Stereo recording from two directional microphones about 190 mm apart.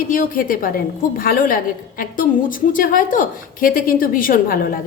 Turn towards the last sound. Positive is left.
turn(degrees=50)  # may be behind; listen again after turning